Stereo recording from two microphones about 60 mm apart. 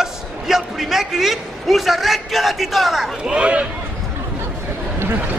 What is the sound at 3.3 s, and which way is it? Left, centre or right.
Speech, centre.